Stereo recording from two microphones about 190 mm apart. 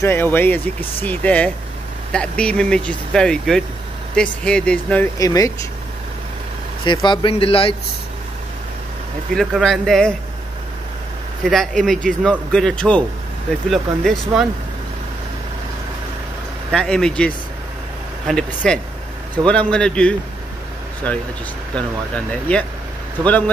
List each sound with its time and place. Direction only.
0.0 s speech: 10° left (ahead or behind)
5.2 s speech: 20° left (ahead or behind)
6.8 s speech: 25° left (ahead or behind)
9.3 s speech: centre (ahead or behind)
11.4 s speech: centre (ahead or behind)
16.7 s speech: 5° left (ahead or behind)
21.7 s speech: 5° left (ahead or behind)